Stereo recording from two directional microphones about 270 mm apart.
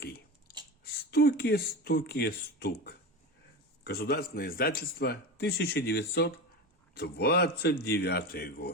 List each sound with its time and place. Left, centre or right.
1.1 s a man's voice: left